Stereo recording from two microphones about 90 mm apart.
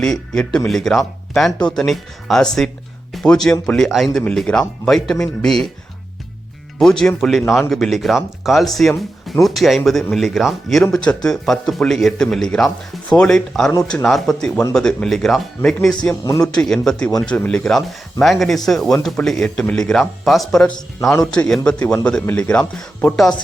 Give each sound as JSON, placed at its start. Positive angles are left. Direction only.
{"t": 0.0, "sound": "a man's voice", "side_deg": 5}
{"t": 7.2, "sound": "a man's voice", "side_deg": 0}
{"t": 21.0, "sound": "a man's voice", "side_deg": 35}
{"t": 21.4, "sound": "a man's voice", "side_deg": 10}